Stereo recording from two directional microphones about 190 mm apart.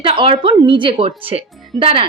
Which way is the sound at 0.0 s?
25° right (ahead or behind).